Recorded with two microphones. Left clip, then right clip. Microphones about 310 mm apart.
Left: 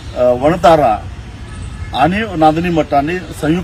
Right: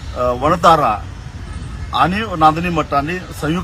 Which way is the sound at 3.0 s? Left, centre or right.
Centre.